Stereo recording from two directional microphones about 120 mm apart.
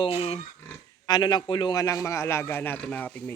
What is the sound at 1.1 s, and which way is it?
Speech, 35° left (ahead or behind).